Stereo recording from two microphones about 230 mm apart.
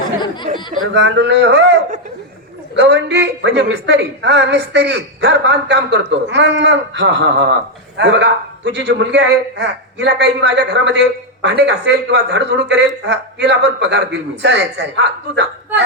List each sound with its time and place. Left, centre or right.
0.8 s a woman's voice: right
2.7 s a woman's voice: right